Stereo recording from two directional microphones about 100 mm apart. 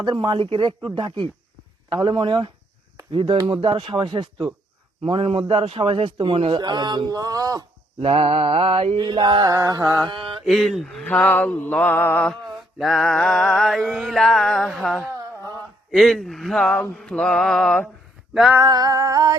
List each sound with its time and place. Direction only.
0.0 s a man's voice: 45° right (ahead or behind)
5.0 s a man's voice: 65° right (ahead or behind)
6.6 s a sound: 45° right (ahead or behind)
8.0 s a man's voice: 65° right (ahead or behind)
9.0 s a sound: 45° right (ahead or behind)
10.1 s mantra: 55° right (ahead or behind)
10.4 s music: 5° left (ahead or behind)
11.0 s mantra: 10° left (ahead or behind)
12.8 s music: centre (ahead or behind)
18.6 s a sound: 40° right (ahead or behind)